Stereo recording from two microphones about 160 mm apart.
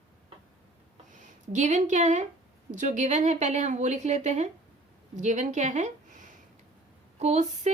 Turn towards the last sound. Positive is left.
turn(degrees=-45)  # may be behind; listen again after turning